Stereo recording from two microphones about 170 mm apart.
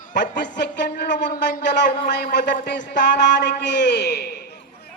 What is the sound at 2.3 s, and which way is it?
Speech, 55° left (ahead or behind).